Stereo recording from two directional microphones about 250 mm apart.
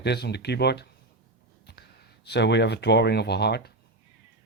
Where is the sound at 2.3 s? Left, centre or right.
Left.